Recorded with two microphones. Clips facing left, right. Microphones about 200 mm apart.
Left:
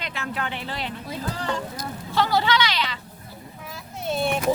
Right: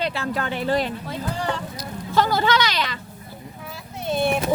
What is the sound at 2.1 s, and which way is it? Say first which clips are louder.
Speech: right 2 dB; 45° right (ahead or behind).